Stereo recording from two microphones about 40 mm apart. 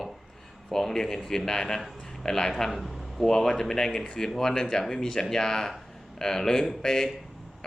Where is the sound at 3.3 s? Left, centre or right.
Centre.